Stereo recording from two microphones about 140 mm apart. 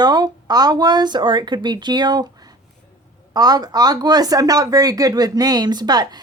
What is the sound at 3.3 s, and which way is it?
Speech, 30° right (ahead or behind).